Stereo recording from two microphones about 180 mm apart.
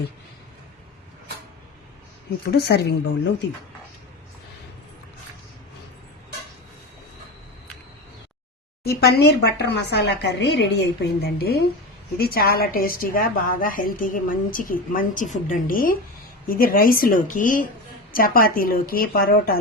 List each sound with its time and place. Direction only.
2.5 s a woman's voice: 65° left (ahead or behind)
8.8 s a woman's voice: 60° left (ahead or behind)